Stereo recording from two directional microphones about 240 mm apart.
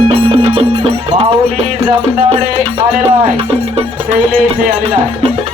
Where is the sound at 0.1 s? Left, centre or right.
Right.